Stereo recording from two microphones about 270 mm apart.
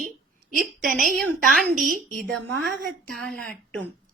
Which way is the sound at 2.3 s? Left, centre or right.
Centre.